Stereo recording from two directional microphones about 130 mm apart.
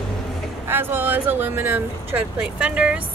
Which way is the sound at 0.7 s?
15° right (ahead or behind).